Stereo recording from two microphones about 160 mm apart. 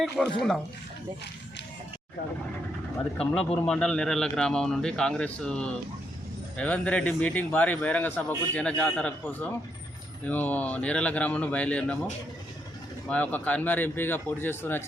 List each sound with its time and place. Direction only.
0.2 s speech: centre (ahead or behind)
3.2 s speech: 5° left (ahead or behind)
13.1 s speech: 10° left (ahead or behind)